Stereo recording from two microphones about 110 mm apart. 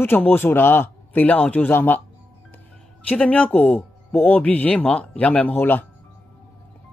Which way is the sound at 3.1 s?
10° left (ahead or behind).